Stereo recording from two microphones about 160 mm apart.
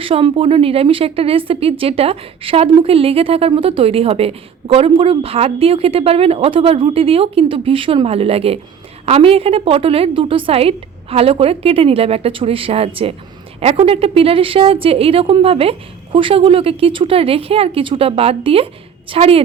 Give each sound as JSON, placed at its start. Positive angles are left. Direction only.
{"t": 0.0, "sound": "a woman's voice", "side_deg": -35}